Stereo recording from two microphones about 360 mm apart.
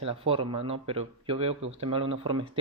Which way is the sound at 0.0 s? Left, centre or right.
Centre.